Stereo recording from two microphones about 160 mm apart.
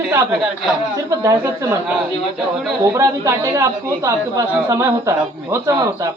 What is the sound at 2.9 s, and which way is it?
Speech, 20° right (ahead or behind).